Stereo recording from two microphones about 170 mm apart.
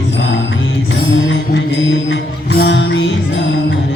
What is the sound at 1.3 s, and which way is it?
Music, 90° left.